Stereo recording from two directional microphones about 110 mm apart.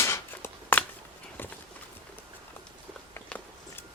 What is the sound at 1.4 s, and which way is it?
Walk, 20° left (ahead or behind).